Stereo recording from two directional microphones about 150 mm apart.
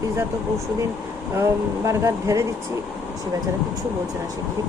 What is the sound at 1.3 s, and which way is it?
Speech, 20° right (ahead or behind).